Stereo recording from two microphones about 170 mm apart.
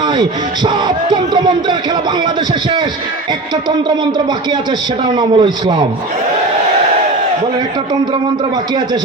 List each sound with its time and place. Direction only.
0.0 s speech: 25° right (ahead or behind)
5.0 s speech: 25° right (ahead or behind)